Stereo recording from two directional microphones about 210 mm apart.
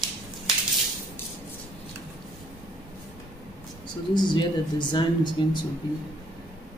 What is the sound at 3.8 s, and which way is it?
Speech, 20° left (ahead or behind).